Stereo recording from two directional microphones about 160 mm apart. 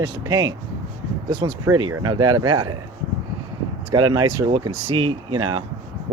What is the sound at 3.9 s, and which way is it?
Speech, 25° right (ahead or behind).